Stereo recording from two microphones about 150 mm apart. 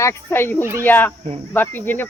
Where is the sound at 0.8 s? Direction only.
10° left (ahead or behind).